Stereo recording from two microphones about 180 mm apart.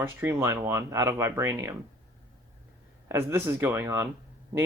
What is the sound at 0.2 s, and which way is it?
Speech, 15° right (ahead or behind).